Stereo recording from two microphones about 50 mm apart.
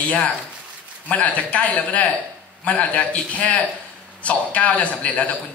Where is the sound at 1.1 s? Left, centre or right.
Left.